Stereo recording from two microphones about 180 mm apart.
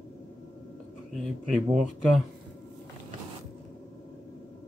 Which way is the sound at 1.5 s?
Centre (ahead or behind).